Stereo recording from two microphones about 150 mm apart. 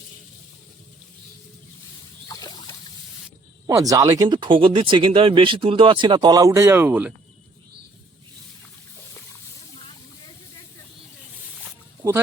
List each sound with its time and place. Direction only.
2.2 s a sound: 25° left (ahead or behind)
3.7 s speech: 20° right (ahead or behind)
9.7 s hiss: 30° left (ahead or behind)